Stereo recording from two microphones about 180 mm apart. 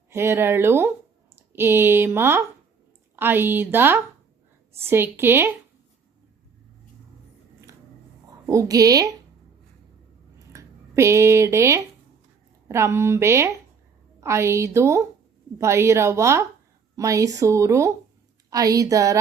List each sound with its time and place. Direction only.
0.1 s speech: 15° right (ahead or behind)
8.4 s a woman's voice: 20° right (ahead or behind)
10.5 s a woman's voice: 15° right (ahead or behind)